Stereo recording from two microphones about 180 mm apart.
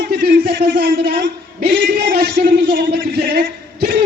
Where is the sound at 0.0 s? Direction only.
60° right (ahead or behind).